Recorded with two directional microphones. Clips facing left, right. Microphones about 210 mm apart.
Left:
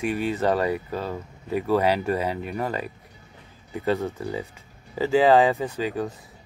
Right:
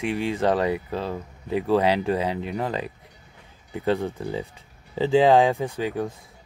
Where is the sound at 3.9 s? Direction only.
15° right (ahead or behind).